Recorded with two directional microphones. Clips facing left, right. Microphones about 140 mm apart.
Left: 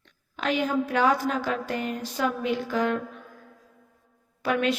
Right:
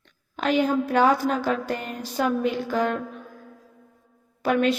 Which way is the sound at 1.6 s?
40° right (ahead or behind).